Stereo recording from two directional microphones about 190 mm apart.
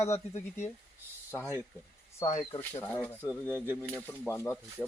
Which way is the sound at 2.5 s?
10° left (ahead or behind).